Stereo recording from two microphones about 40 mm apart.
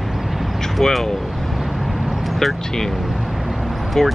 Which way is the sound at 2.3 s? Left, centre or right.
Centre.